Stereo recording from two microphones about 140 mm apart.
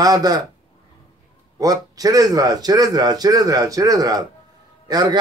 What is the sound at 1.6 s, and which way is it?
A man's voice, 25° right (ahead or behind).